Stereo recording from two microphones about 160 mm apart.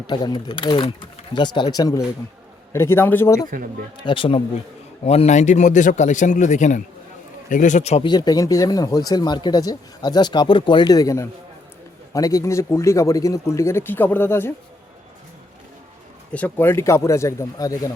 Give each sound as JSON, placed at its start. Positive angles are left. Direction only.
{"t": 0.1, "sound": "speech", "side_deg": 25}
{"t": 3.5, "sound": "speech", "side_deg": -60}
{"t": 3.9, "sound": "a man's voice", "side_deg": 30}
{"t": 8.0, "sound": "speech", "side_deg": 25}
{"t": 16.3, "sound": "speech", "side_deg": 10}